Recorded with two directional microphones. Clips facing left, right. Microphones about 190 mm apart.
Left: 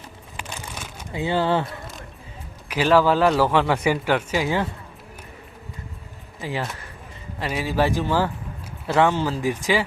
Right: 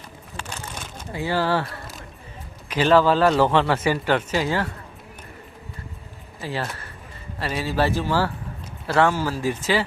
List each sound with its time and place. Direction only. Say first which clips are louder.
0.3 s a sound: right 1 dB; 10° left (ahead or behind)
2.6 s speech: right 1 dB; 10° left (ahead or behind)
6.4 s speech: even; 15° left (ahead or behind)